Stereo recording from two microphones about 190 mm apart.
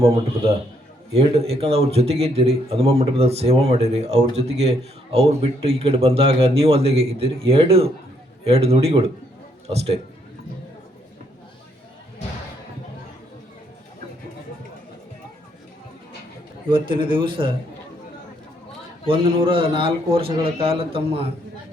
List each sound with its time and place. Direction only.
1.1 s speech: 30° right (ahead or behind)
16.6 s a man's voice: 25° right (ahead or behind)
19.0 s a man's voice: 30° right (ahead or behind)